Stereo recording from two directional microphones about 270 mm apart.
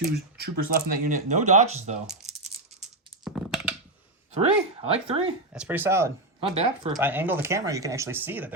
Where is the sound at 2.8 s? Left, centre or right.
Centre.